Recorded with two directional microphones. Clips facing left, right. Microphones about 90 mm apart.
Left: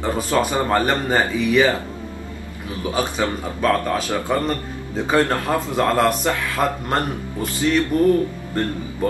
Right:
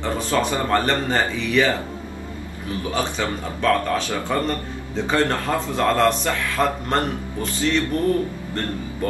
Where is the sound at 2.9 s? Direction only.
15° left (ahead or behind).